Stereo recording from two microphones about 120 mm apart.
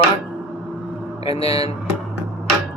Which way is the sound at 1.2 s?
55° left (ahead or behind).